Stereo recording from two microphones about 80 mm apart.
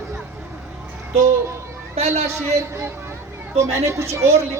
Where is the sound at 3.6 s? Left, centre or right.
Right.